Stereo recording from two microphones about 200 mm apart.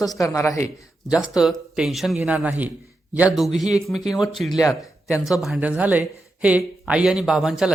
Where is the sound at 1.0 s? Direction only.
5° right (ahead or behind).